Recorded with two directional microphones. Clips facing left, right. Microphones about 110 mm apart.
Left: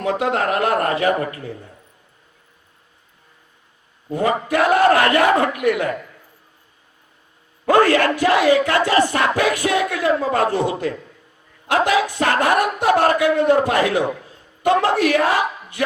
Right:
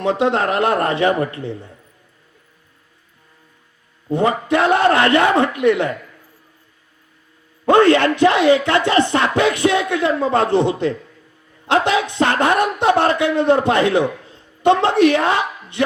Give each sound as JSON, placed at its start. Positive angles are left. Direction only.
{"t": 0.0, "sound": "speech", "side_deg": -25}
{"t": 4.1, "sound": "speech", "side_deg": -25}
{"t": 7.6, "sound": "speech", "side_deg": -25}